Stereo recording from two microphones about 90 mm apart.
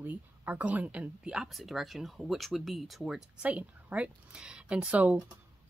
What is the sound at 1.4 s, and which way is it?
Speech, centre (ahead or behind).